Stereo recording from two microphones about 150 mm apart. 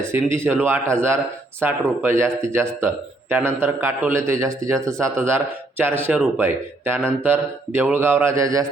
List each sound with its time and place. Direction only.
0.0 s a man's voice: 15° right (ahead or behind)